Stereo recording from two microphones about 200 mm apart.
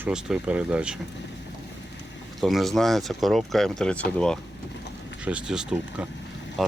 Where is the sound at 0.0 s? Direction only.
5° right (ahead or behind).